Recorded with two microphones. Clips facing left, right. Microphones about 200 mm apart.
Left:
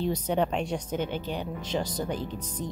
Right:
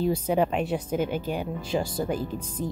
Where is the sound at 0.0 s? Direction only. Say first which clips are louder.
Right 3 dB; 5° right (ahead or behind).